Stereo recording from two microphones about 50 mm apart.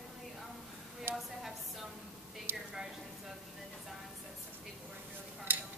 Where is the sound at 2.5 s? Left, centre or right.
Right.